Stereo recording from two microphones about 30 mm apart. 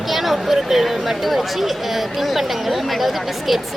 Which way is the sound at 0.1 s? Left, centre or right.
Centre.